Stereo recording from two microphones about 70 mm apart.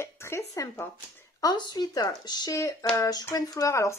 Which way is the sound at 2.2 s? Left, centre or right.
Left.